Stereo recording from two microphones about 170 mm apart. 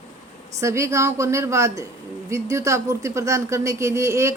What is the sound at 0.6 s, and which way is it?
Speech, 15° right (ahead or behind).